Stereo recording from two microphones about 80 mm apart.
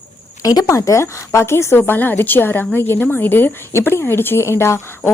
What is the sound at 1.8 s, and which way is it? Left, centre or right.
Speech, left.